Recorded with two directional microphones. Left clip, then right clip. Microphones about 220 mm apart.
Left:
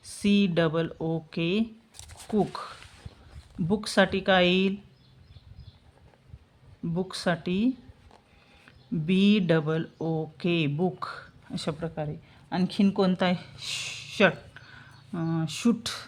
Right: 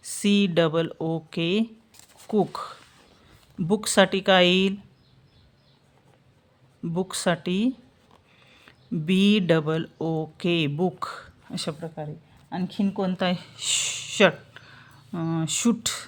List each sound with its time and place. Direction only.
0.0 s speech: 15° right (ahead or behind)
6.8 s speech: 20° right (ahead or behind)
12.5 s speech: 15° left (ahead or behind)
13.1 s speech: 5° right (ahead or behind)